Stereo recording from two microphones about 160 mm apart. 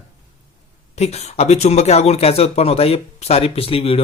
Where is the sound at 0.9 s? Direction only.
40° left (ahead or behind).